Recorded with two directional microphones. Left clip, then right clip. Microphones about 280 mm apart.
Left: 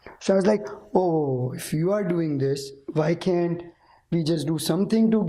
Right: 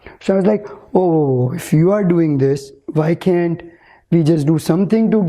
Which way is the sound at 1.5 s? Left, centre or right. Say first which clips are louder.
Right 9 dB; right.